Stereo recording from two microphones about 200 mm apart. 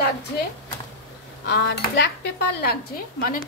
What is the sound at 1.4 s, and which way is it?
A woman's voice, 55° left (ahead or behind).